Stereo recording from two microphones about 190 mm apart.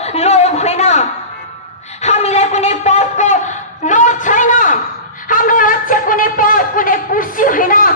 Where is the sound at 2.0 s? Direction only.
35° left (ahead or behind).